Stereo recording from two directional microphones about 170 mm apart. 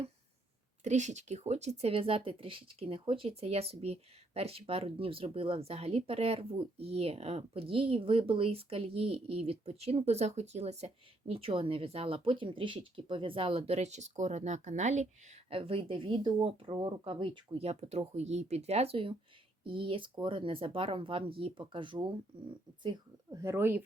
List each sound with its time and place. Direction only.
0.9 s speech: 45° right (ahead or behind)
23.3 s speech: 15° right (ahead or behind)